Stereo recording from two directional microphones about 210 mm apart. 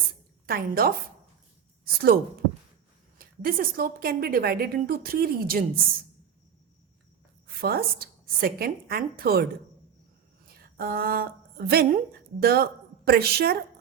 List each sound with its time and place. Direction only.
0.4 s a woman's voice: 45° right (ahead or behind)
3.2 s a woman's voice: 45° right (ahead or behind)
7.6 s a woman's voice: 45° right (ahead or behind)
10.8 s a woman's voice: 45° right (ahead or behind)